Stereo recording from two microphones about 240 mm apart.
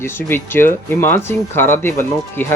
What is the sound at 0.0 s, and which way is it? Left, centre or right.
Speech, centre.